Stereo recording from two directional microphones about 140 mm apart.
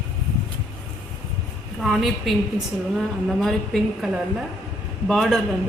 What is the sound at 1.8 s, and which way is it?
A woman's voice, centre (ahead or behind).